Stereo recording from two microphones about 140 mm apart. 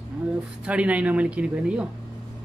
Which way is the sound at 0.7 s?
10° right (ahead or behind).